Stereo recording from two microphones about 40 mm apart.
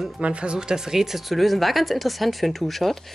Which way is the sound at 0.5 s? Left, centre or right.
Centre.